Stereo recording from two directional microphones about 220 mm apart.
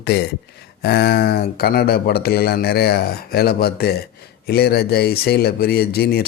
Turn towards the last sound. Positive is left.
turn(degrees=45)  # may be behind; listen again after turning